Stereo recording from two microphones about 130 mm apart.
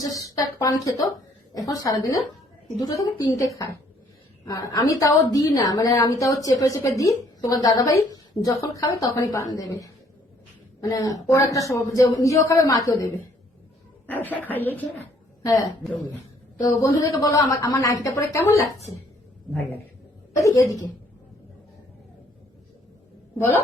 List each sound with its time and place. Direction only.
0.0 s a woman's voice: 25° left (ahead or behind)
15.4 s a woman's voice: 25° left (ahead or behind)
20.3 s a woman's voice: 25° left (ahead or behind)